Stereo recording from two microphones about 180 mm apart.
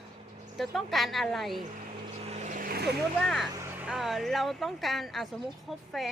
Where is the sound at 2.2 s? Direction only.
35° right (ahead or behind).